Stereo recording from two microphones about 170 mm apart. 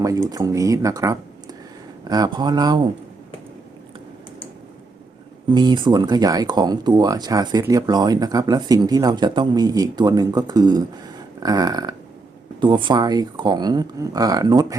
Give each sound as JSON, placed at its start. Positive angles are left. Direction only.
{"t": 0.0, "sound": "speech", "side_deg": -20}
{"t": 5.5, "sound": "speech", "side_deg": -25}